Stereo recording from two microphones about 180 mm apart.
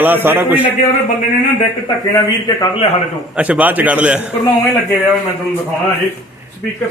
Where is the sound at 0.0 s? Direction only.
10° right (ahead or behind).